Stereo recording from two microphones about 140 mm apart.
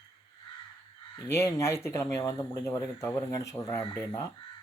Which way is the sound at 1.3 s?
20° left (ahead or behind).